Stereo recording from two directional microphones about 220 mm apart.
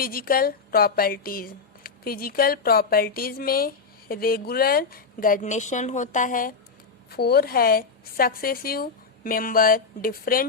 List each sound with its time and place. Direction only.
0.0 s a woman's voice: 40° left (ahead or behind)